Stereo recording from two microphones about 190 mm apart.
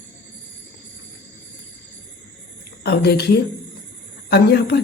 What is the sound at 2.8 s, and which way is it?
Speech, 60° left (ahead or behind).